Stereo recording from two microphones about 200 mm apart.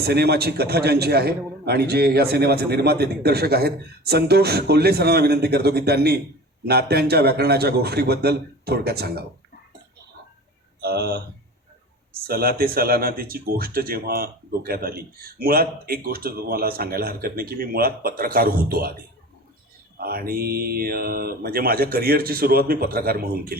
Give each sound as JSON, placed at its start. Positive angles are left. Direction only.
{"t": 0.0, "sound": "speech", "side_deg": -55}
{"t": 10.8, "sound": "speech", "side_deg": -55}
{"t": 12.3, "sound": "speech", "side_deg": -50}
{"t": 20.0, "sound": "speech", "side_deg": -50}